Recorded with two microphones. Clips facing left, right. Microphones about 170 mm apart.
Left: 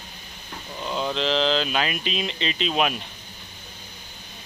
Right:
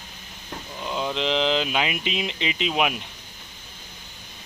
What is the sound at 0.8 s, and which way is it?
Speech, 5° right (ahead or behind).